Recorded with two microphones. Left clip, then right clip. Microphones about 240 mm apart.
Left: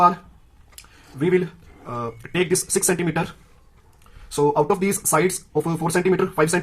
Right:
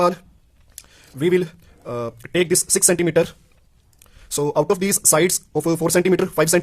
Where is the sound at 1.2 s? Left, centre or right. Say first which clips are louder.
Right 2 dB; right.